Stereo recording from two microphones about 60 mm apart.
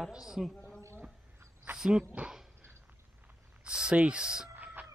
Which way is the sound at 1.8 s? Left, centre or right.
Centre.